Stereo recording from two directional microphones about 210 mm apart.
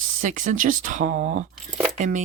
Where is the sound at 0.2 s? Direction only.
40° right (ahead or behind).